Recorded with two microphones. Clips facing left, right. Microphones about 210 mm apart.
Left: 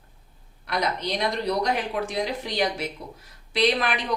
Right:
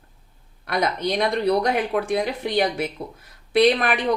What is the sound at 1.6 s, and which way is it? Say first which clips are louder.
A woman's voice: right 4 dB; 55° right (ahead or behind).